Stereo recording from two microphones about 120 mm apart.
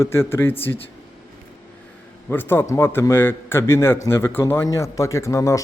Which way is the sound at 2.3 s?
15° left (ahead or behind).